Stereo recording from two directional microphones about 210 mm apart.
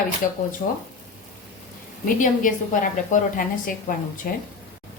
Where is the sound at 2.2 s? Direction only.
40° left (ahead or behind).